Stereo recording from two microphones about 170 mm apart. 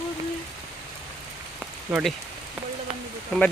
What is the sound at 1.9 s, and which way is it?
Speech, 5° right (ahead or behind).